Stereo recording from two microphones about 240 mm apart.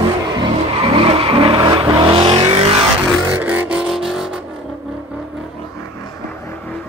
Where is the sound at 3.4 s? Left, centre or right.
Centre.